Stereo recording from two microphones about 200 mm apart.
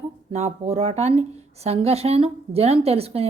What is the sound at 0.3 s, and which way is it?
Speech, 35° right (ahead or behind).